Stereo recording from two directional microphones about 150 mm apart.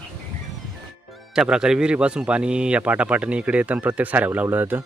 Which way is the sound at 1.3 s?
5° right (ahead or behind).